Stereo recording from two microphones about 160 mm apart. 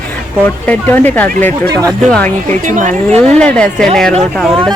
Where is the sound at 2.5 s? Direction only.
50° right (ahead or behind).